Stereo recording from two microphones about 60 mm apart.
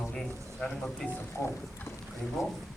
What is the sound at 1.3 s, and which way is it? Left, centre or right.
Speech, left.